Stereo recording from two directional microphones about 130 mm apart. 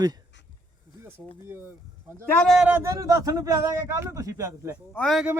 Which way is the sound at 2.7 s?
20° right (ahead or behind).